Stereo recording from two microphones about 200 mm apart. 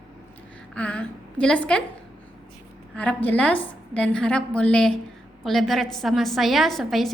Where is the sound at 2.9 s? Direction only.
5° left (ahead or behind).